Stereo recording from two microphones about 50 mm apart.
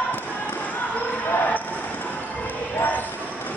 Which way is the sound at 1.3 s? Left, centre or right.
Left.